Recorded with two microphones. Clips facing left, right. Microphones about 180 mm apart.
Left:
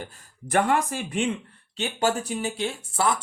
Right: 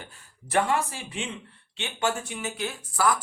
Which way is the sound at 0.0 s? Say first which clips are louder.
Left 7 dB; 40° left (ahead or behind).